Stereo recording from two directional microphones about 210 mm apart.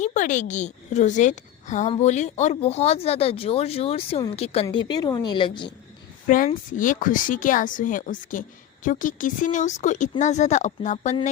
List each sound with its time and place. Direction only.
0.0 s a woman's voice: 35° left (ahead or behind)
6.2 s a woman's voice: 40° left (ahead or behind)